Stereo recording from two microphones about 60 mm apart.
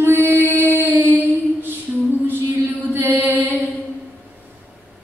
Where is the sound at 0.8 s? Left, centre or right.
Right.